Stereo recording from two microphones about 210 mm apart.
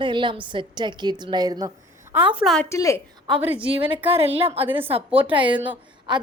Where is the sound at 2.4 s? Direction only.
Centre (ahead or behind).